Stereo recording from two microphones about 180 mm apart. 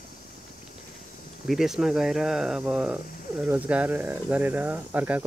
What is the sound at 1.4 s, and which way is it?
Speech, centre (ahead or behind).